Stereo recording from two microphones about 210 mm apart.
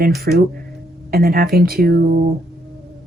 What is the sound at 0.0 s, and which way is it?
Speech, 50° right (ahead or behind).